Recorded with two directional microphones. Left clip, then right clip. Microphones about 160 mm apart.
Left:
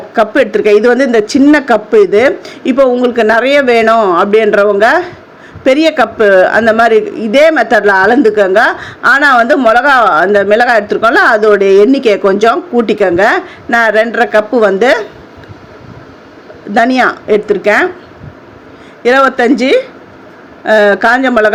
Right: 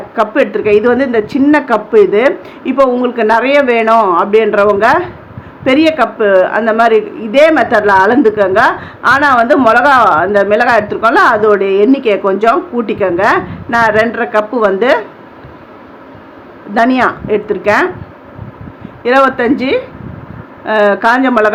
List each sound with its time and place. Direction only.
0.1 s a woman's voice: 30° left (ahead or behind)
16.7 s a woman's voice: 30° left (ahead or behind)
19.0 s a woman's voice: 30° left (ahead or behind)